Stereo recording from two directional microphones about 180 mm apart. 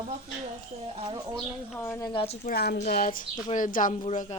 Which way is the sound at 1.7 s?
15° left (ahead or behind).